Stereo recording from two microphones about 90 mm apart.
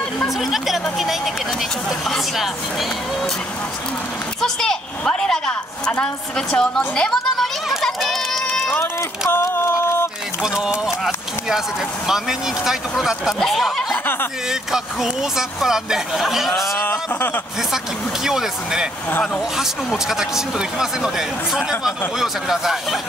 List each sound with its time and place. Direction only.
0.4 s speech: centre (ahead or behind)
4.4 s a woman's voice: 5° left (ahead or behind)
7.0 s a sound: 5° left (ahead or behind)
9.3 s a sound: 25° left (ahead or behind)
10.4 s speech: 5° right (ahead or behind)
12.1 s speech: 5° right (ahead or behind)
16.7 s a sound: 20° left (ahead or behind)
18.2 s speech: 5° right (ahead or behind)
19.0 s speech: 20° left (ahead or behind)
19.5 s speech: 5° right (ahead or behind)